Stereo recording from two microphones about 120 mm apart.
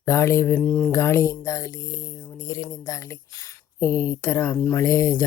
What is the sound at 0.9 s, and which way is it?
Speech, 25° left (ahead or behind).